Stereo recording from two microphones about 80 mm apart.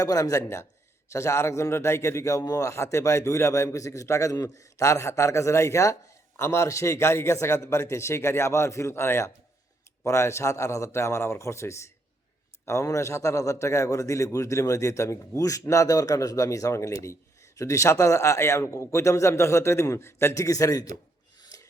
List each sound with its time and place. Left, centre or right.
0.0 s a man's voice: left
21.5 s filing: left